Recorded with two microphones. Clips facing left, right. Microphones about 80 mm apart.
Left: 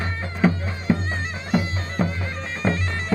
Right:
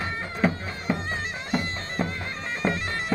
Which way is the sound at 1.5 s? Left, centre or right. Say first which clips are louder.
Left 5 dB; centre.